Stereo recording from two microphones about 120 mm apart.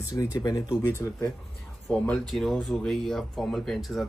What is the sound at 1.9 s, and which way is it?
Speech, 5° left (ahead or behind).